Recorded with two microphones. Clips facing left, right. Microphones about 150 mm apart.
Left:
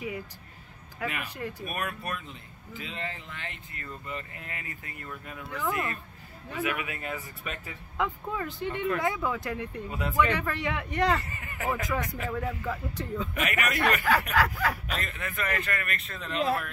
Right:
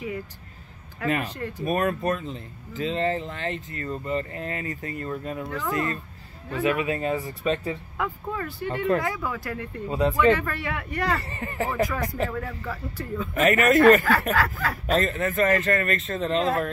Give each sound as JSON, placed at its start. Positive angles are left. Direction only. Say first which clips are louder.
{"t": 1.0, "sound": "speech", "louder": "right 7 dB", "side_deg": -35}
{"t": 5.7, "sound": "speech", "louder": "right 4 dB", "side_deg": 20}
{"t": 6.6, "sound": "speech", "louder": "right 8 dB", "side_deg": -30}
{"t": 8.0, "sound": "speech", "louder": "left 1 dB", "side_deg": 20}
{"t": 8.6, "sound": "speech", "louder": "right 5 dB", "side_deg": -40}
{"t": 9.0, "sound": "speech", "louder": "even", "side_deg": 20}
{"t": 9.8, "sound": "speech", "louder": "right 12 dB", "side_deg": -30}
{"t": 10.1, "sound": "speech", "louder": "right 3 dB", "side_deg": 15}
{"t": 11.2, "sound": "speech", "louder": "right 3 dB", "side_deg": -35}
{"t": 11.9, "sound": "speech", "louder": "right 3 dB", "side_deg": 20}
{"t": 13.3, "sound": "speech", "louder": "right 14 dB", "side_deg": -40}
{"t": 14.3, "sound": "speech", "louder": "right 1 dB", "side_deg": 10}
{"t": 14.9, "sound": "speech", "louder": "right 12 dB", "side_deg": -40}